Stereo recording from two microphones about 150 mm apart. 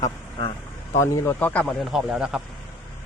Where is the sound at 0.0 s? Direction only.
35° left (ahead or behind).